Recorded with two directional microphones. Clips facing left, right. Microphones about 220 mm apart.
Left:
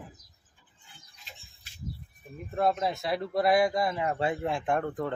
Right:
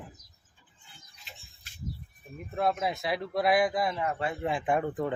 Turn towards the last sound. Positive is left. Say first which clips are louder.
# right 1 dB
turn(degrees=-5)  # may be behind; listen again after turning